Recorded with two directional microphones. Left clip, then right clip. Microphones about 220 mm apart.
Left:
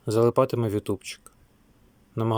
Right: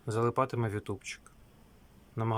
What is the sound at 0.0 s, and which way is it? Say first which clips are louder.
Speech: left 9 dB; 20° left (ahead or behind).